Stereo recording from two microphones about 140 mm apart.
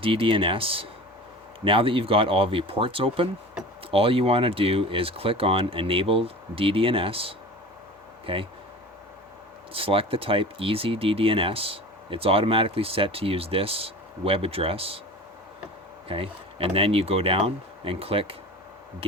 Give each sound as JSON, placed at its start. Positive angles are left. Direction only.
{"t": 0.0, "sound": "speech", "side_deg": -40}
{"t": 9.7, "sound": "speech", "side_deg": -40}
{"t": 16.0, "sound": "speech", "side_deg": -40}